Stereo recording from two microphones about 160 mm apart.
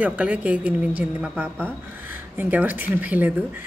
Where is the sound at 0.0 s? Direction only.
10° right (ahead or behind).